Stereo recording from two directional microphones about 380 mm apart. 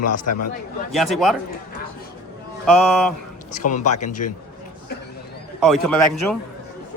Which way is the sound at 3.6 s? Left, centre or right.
Left.